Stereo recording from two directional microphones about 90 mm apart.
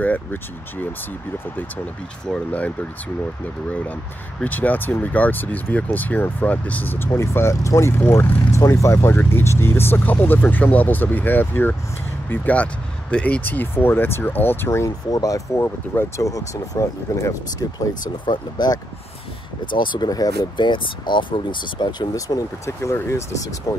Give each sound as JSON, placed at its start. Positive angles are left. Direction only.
{"t": 0.0, "sound": "speech", "side_deg": 15}
{"t": 2.2, "sound": "speech", "side_deg": 10}
{"t": 4.4, "sound": "speech", "side_deg": 20}
{"t": 15.0, "sound": "speech", "side_deg": 45}
{"t": 15.6, "sound": "speech", "side_deg": 25}
{"t": 16.3, "sound": "speech", "side_deg": 40}
{"t": 18.2, "sound": "speech", "side_deg": 60}
{"t": 19.7, "sound": "speech", "side_deg": 60}
{"t": 20.1, "sound": "speech", "side_deg": 45}
{"t": 22.7, "sound": "speech", "side_deg": 30}